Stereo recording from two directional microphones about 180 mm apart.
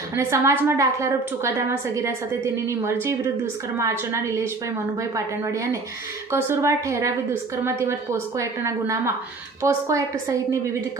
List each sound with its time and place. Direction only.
0.2 s a woman's voice: 15° right (ahead or behind)